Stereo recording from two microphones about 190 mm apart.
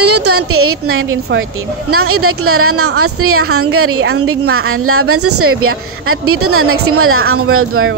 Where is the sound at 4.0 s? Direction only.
90° right.